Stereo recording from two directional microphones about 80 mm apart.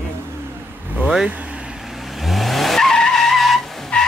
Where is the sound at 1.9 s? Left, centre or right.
Centre.